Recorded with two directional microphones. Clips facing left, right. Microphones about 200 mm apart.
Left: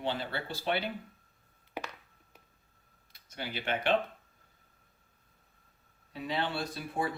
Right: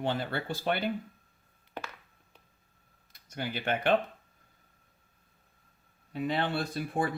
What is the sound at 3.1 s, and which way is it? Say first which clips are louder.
Speech: right 4 dB; 50° right (ahead or behind).